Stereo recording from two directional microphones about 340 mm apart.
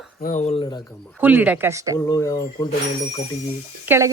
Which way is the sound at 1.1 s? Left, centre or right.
Centre.